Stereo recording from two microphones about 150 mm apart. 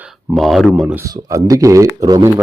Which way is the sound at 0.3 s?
Centre (ahead or behind).